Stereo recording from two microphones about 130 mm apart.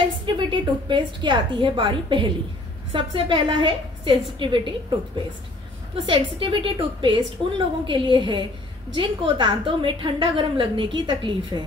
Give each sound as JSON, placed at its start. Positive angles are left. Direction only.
{"t": 0.4, "sound": "a woman's voice", "side_deg": -40}
{"t": 6.0, "sound": "a woman's voice", "side_deg": -40}